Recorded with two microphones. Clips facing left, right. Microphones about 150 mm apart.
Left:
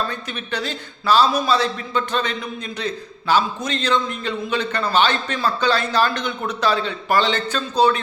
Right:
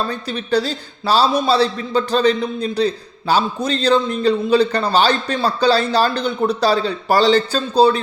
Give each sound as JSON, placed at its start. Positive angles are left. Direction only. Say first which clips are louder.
{"t": 0.1, "sound": "a man's voice", "louder": "right 9 dB", "side_deg": -35}